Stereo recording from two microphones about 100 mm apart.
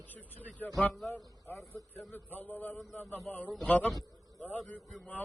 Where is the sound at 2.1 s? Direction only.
15° left (ahead or behind).